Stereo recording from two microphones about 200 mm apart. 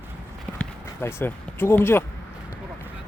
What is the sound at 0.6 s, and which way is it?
Run, 10° left (ahead or behind).